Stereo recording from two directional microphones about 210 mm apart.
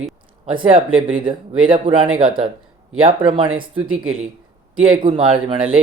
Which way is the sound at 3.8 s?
80° right.